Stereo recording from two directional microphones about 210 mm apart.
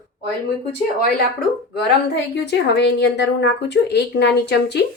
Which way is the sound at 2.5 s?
55° left (ahead or behind).